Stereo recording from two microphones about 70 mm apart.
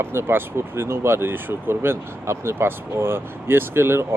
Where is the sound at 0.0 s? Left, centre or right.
Right.